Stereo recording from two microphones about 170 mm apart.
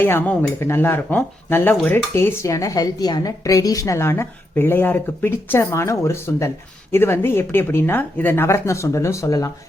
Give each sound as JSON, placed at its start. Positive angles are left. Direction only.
{"t": 0.0, "sound": "speech", "side_deg": 10}